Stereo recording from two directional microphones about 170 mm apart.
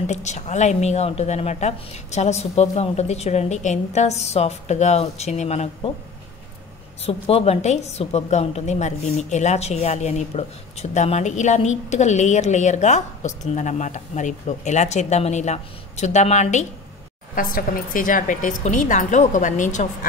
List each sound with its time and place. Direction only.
0.0 s a woman's voice: 45° left (ahead or behind)
7.1 s a woman's voice: 35° left (ahead or behind)
17.4 s a woman's voice: 55° left (ahead or behind)